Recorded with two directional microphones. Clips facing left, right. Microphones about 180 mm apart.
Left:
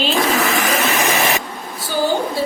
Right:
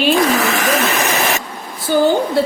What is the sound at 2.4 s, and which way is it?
Speech, 60° right (ahead or behind).